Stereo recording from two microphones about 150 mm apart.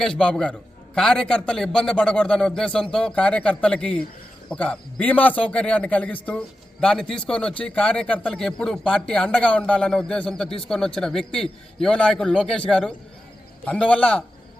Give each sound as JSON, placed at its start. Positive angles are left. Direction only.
{"t": 0.0, "sound": "a man's voice", "side_deg": 5}